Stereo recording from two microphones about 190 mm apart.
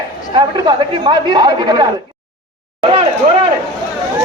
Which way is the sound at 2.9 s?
30° right (ahead or behind).